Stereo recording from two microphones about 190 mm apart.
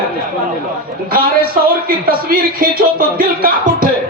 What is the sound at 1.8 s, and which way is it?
Music, 50° right (ahead or behind).